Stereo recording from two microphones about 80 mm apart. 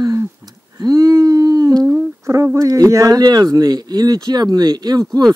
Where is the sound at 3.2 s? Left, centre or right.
Right.